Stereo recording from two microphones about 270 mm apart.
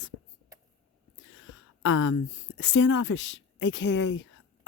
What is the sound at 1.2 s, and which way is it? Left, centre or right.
Speech, left.